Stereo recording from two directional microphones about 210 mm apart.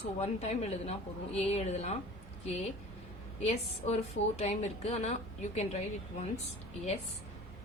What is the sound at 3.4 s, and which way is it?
Speech, 30° left (ahead or behind).